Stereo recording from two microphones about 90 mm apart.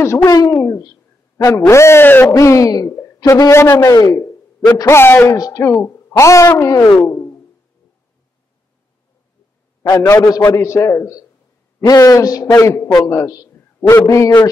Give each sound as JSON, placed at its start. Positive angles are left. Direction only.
{"t": 0.2, "sound": "a man's voice", "side_deg": 45}
{"t": 1.5, "sound": "a man's voice", "side_deg": 30}
{"t": 2.3, "sound": "a man's voice", "side_deg": 35}
{"t": 3.7, "sound": "a sound", "side_deg": 40}
{"t": 4.8, "sound": "a man's voice", "side_deg": 25}
{"t": 5.4, "sound": "speech", "side_deg": 40}
{"t": 5.7, "sound": "speech", "side_deg": 30}
{"t": 7.0, "sound": "a sound", "side_deg": 30}
{"t": 10.0, "sound": "a man's voice", "side_deg": 40}
{"t": 10.6, "sound": "a man's voice", "side_deg": 30}
{"t": 12.5, "sound": "a man's voice", "side_deg": 35}